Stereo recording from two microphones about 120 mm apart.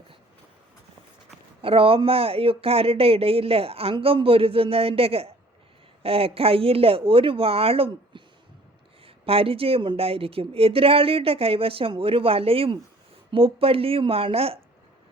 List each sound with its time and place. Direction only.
1.6 s speech: 50° right (ahead or behind)